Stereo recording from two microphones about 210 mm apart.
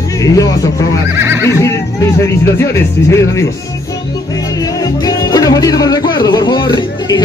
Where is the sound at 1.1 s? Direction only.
10° right (ahead or behind).